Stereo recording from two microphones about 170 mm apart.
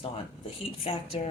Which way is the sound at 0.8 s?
35° left (ahead or behind).